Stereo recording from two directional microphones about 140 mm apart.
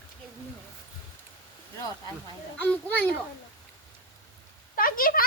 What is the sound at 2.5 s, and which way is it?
Speech, 10° left (ahead or behind).